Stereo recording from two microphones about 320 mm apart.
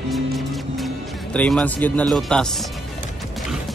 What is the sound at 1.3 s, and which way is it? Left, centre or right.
Speech, centre.